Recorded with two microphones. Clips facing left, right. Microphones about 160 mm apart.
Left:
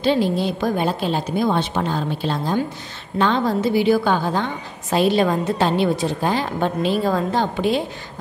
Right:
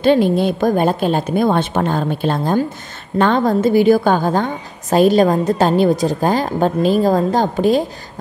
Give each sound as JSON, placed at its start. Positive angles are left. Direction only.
{"t": 0.0, "sound": "a woman's voice", "side_deg": -55}